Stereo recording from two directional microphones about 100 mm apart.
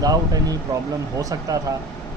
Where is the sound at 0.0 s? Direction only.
40° right (ahead or behind).